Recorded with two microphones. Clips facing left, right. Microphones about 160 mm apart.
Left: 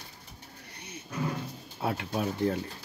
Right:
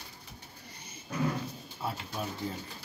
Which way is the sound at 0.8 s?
70° left (ahead or behind).